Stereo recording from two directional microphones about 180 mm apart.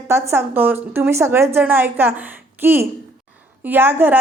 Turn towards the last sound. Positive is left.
turn(degrees=-10)  # may be behind; listen again after turning